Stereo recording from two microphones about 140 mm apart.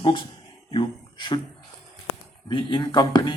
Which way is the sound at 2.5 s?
35° left (ahead or behind).